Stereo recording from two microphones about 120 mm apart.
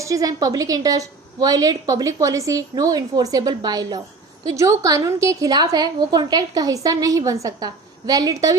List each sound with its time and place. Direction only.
0.0 s a woman's voice: 30° right (ahead or behind)